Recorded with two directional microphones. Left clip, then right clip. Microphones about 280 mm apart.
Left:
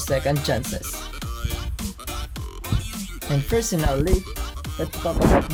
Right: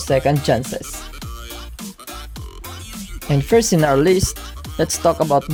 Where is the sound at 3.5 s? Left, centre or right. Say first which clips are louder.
Right 9 dB; right.